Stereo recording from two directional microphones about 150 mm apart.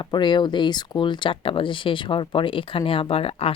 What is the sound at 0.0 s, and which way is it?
Speech, 30° left (ahead or behind).